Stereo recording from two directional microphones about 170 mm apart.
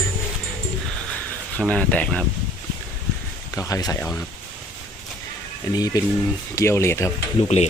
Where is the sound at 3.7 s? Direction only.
20° left (ahead or behind).